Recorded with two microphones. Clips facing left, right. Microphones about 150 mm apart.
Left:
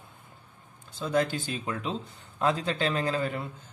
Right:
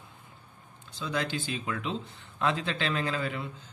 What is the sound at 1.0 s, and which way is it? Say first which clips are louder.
Speech: left 5 dB; 45° left (ahead or behind).